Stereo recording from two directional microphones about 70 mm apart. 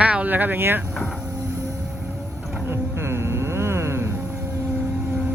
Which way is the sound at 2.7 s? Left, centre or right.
Right.